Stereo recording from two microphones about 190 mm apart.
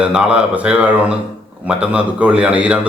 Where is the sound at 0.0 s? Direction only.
5° right (ahead or behind).